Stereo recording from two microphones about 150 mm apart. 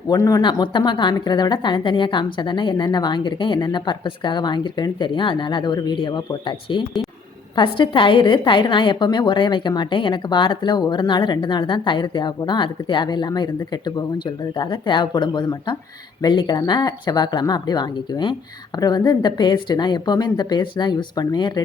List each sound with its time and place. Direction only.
0.1 s a woman's voice: 25° left (ahead or behind)